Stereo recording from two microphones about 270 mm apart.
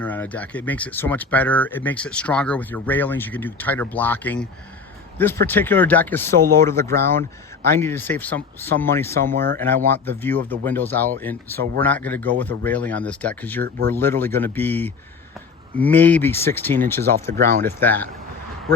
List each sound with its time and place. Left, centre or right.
0.0 s speech: centre
17.3 s speech: right
17.7 s speech: centre